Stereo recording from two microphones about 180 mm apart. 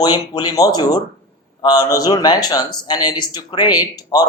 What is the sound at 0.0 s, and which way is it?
Speech, 25° left (ahead or behind).